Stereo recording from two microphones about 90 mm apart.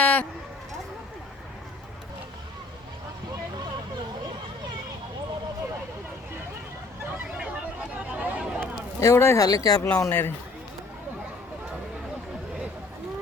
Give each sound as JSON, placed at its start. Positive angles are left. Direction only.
{"t": 0.0, "sound": "a sound", "side_deg": 15}
{"t": 7.3, "sound": "chatter", "side_deg": -15}
{"t": 9.0, "sound": "speech", "side_deg": 30}
{"t": 9.5, "sound": "speech", "side_deg": 45}
{"t": 9.8, "sound": "speech", "side_deg": 25}